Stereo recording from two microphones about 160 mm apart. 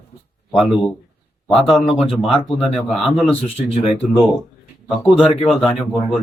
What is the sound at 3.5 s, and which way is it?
Speech, 40° left (ahead or behind).